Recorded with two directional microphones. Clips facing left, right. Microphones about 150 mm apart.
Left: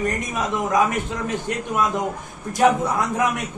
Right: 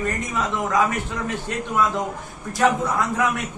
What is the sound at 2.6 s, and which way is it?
Speech, 20° left (ahead or behind).